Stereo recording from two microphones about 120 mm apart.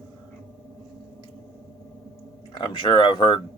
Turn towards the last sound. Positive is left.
turn(degrees=45)  # may be behind; listen again after turning